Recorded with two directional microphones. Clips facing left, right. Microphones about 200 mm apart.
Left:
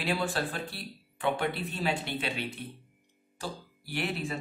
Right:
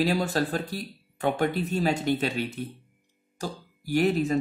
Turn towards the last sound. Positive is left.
turn(degrees=-40)  # may be behind; listen again after turning